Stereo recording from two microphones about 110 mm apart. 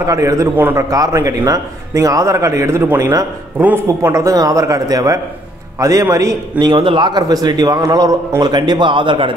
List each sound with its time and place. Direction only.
0.0 s a man's voice: 30° right (ahead or behind)
0.6 s a man's voice: 15° right (ahead or behind)
0.8 s a man's voice: 30° right (ahead or behind)
6.6 s a man's voice: 45° right (ahead or behind)